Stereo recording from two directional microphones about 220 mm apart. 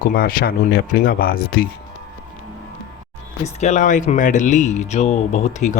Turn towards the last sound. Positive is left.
turn(degrees=35)  # may be behind; listen again after turning